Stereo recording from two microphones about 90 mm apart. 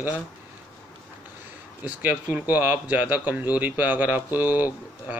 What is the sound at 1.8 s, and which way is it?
Speech, 20° right (ahead or behind).